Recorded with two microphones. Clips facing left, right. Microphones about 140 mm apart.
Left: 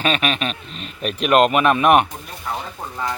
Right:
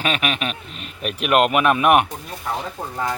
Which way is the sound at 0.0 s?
10° right (ahead or behind).